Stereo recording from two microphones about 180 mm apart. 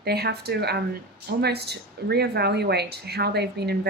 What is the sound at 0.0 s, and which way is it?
Speech, 65° right (ahead or behind).